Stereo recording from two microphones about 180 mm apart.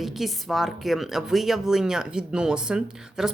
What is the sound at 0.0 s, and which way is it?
A woman's voice, centre (ahead or behind).